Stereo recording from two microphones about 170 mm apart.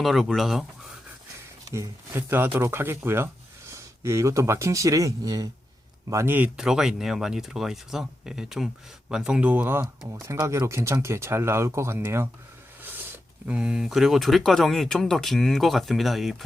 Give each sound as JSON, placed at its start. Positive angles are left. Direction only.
{"t": 0.0, "sound": "speech", "side_deg": 0}
{"t": 1.6, "sound": "speech", "side_deg": -15}
{"t": 10.2, "sound": "speech", "side_deg": -15}
{"t": 12.8, "sound": "a sound", "side_deg": -10}
{"t": 13.5, "sound": "speech", "side_deg": -5}